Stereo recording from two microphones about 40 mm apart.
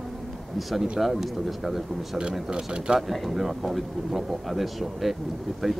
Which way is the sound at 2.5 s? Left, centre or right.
Right.